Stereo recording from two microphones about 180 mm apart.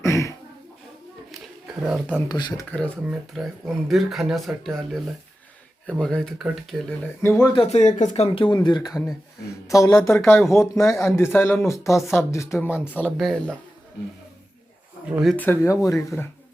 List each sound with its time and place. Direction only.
0.0 s a sound: 15° left (ahead or behind)
1.3 s a sound: 5° right (ahead or behind)
2.3 s speech: 20° left (ahead or behind)
2.7 s speech: 10° left (ahead or behind)
3.0 s speech: 5° right (ahead or behind)
7.2 s speech: 15° left (ahead or behind)
7.6 s speech: 40° left (ahead or behind)
8.3 s speech: 25° left (ahead or behind); by 13.6 s centre (ahead or behind)
15.0 s speech: 5° right (ahead or behind)
15.4 s speech: 15° left (ahead or behind)